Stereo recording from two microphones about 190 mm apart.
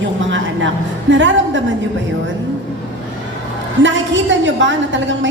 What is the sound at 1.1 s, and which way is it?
Speech, 80° right.